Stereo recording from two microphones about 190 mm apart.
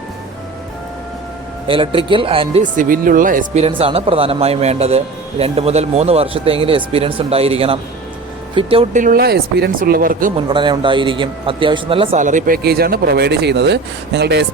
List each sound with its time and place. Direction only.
1.6 s speech: 25° right (ahead or behind); by 3.6 s 45° right (ahead or behind)
3.6 s a man's voice: 30° right (ahead or behind); by 10.3 s 45° right (ahead or behind)
10.5 s speech: 25° right (ahead or behind)
12.2 s speech: 40° right (ahead or behind); by 14.4 s 65° right (ahead or behind)